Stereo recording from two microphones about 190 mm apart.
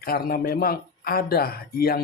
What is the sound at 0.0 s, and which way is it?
Speech, 50° left (ahead or behind).